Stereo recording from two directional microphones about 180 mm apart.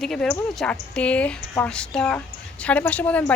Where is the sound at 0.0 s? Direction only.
5° left (ahead or behind).